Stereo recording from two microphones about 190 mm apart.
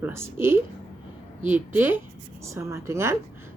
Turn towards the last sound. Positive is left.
turn(degrees=-15)  # may be behind; listen again after turning